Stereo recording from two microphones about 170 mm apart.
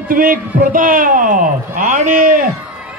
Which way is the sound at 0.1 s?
55° right (ahead or behind).